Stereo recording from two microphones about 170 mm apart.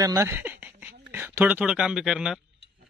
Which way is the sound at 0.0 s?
20° right (ahead or behind).